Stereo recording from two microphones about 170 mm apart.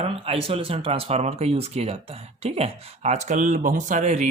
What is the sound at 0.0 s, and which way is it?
Speech, 35° right (ahead or behind).